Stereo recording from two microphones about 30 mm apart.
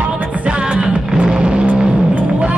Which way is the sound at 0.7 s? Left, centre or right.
Right.